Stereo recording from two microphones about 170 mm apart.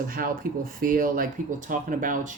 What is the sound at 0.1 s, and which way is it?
Speech, 55° right (ahead or behind).